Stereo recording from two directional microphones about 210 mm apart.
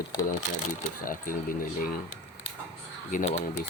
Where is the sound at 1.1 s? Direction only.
40° left (ahead or behind).